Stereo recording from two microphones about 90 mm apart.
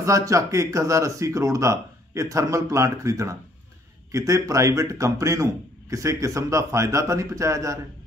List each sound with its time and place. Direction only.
0.0 s a man's voice: 35° right (ahead or behind)